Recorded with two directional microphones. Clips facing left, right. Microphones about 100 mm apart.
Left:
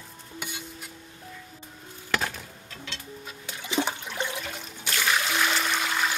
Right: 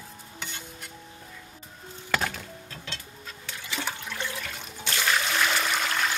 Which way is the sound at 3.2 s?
20° left (ahead or behind).